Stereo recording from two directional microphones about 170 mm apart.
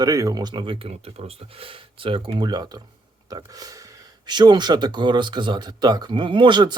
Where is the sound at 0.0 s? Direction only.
20° right (ahead or behind).